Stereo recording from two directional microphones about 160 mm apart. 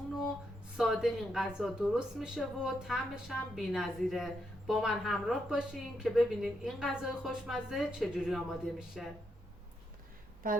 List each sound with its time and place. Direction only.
0.8 s a woman's voice: centre (ahead or behind)
10.4 s speech: 60° right (ahead or behind)